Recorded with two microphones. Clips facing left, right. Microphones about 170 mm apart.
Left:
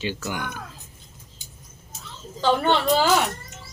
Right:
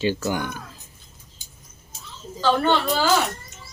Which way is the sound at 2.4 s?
15° left (ahead or behind).